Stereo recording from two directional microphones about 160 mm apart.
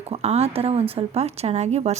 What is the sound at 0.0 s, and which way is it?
Speech, 40° right (ahead or behind).